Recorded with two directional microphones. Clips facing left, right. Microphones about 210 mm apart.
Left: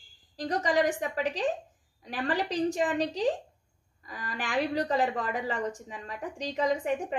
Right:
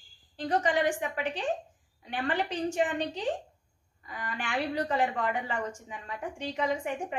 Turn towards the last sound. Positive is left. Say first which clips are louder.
# left 3 dB
turn(degrees=35)  # may be behind; listen again after turning